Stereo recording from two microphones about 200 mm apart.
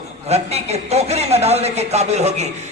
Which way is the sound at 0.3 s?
30° right (ahead or behind).